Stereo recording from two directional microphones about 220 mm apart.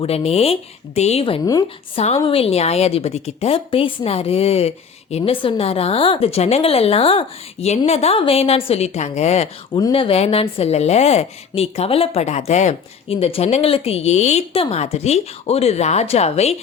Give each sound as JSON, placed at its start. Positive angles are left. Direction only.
{"t": 0.0, "sound": "speech", "side_deg": 25}